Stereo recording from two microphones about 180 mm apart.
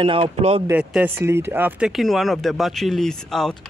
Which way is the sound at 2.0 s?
Centre (ahead or behind).